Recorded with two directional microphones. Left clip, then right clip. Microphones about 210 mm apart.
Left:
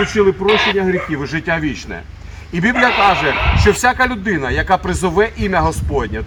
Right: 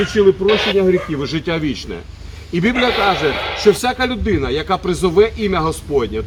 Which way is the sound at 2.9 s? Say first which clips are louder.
Left 3 dB; 45° left (ahead or behind).